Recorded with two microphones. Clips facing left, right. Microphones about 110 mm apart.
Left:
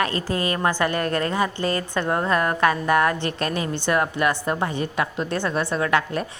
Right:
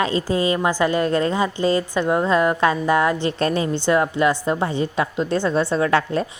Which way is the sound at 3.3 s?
30° right (ahead or behind).